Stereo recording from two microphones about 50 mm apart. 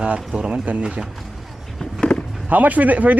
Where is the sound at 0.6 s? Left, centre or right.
Right.